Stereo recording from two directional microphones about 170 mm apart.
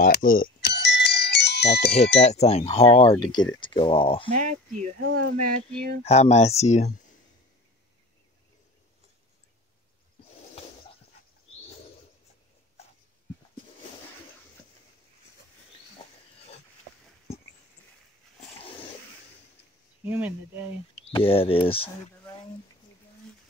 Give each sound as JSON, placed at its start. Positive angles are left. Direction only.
{"t": 0.0, "sound": "doorbell", "side_deg": 55}
{"t": 0.7, "sound": "bell", "side_deg": 85}
{"t": 2.1, "sound": "speech", "side_deg": 40}
{"t": 4.4, "sound": "speech", "side_deg": -45}
{"t": 5.0, "sound": "speech", "side_deg": -60}
{"t": 6.0, "sound": "speech", "side_deg": 40}
{"t": 20.1, "sound": "speech", "side_deg": -10}
{"t": 21.1, "sound": "speech", "side_deg": 35}